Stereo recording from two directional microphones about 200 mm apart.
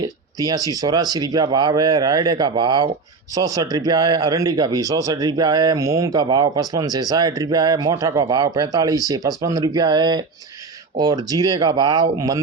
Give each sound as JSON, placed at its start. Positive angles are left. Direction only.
{"t": 0.0, "sound": "speech", "side_deg": -20}